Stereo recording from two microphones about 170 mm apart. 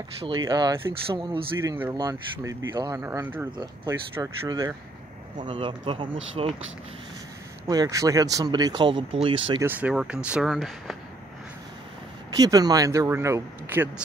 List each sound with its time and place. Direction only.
0.2 s speech: 25° right (ahead or behind)
3.5 s speech: 20° right (ahead or behind)
7.6 s speech: 25° right (ahead or behind)
9.6 s speech: 10° right (ahead or behind)
12.3 s speech: 20° right (ahead or behind)